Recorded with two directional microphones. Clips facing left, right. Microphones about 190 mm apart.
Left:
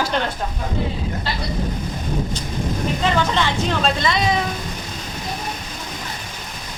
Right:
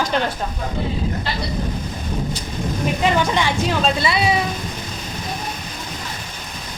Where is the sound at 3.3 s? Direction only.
10° right (ahead or behind).